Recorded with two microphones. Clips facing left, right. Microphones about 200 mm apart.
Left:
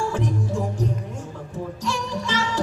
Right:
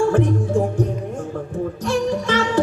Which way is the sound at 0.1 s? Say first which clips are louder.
Right 7 dB; 55° right (ahead or behind).